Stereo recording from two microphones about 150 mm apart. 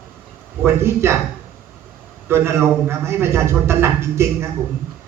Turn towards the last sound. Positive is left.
turn(degrees=-15)  # may be behind; listen again after turning